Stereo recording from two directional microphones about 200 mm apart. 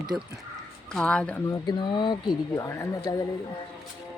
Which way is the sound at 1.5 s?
20° left (ahead or behind).